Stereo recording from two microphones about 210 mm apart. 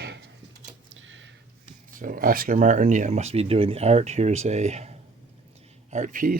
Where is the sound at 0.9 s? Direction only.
65° right (ahead or behind).